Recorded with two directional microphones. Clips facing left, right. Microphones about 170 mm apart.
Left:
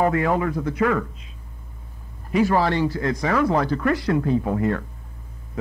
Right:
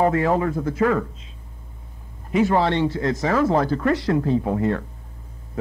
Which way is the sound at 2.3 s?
25° right (ahead or behind).